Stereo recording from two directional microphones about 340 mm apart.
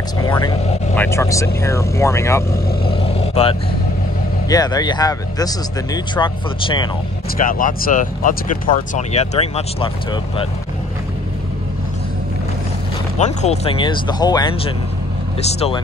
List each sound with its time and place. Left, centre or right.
0.2 s speech: centre
7.3 s speech: left
13.2 s speech: centre